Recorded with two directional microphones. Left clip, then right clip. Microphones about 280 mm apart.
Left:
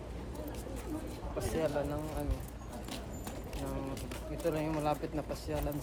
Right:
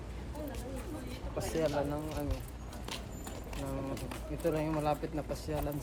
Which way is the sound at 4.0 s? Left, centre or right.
Centre.